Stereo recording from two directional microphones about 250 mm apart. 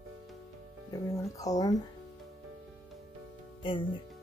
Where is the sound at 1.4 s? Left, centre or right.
Centre.